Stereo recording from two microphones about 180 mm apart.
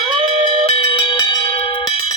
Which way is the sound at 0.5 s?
30° left (ahead or behind).